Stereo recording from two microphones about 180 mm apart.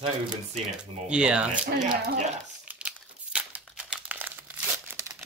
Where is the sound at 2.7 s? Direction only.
5° right (ahead or behind).